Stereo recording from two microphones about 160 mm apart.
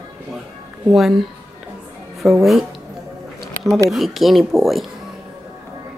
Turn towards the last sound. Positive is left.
turn(degrees=0)  # may be behind; listen again after turning